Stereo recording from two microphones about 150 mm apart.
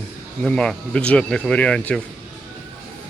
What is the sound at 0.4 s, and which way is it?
Speech, 5° left (ahead or behind).